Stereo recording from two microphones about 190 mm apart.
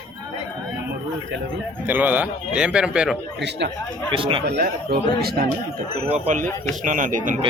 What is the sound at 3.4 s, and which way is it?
Speech, 65° right (ahead or behind).